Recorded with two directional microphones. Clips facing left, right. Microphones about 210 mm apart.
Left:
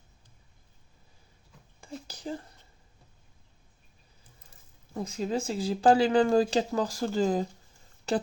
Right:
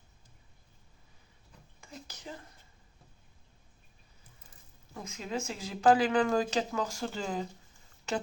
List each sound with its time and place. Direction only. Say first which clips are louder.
1.8 s whispering: left 8 dB; 30° left (ahead or behind)
4.9 s speech: left 6 dB; 35° left (ahead or behind)